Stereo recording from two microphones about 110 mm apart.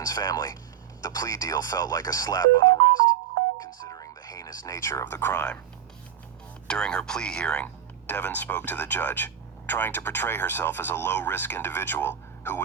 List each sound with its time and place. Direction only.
0.0 s speech: 35° left (ahead or behind)
3.6 s music: 35° left (ahead or behind)
6.7 s speech: 10° left (ahead or behind)